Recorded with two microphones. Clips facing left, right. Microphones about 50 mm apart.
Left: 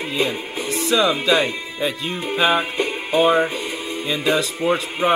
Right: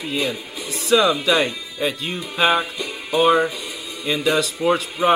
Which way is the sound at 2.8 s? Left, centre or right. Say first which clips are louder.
Left 2 dB; left.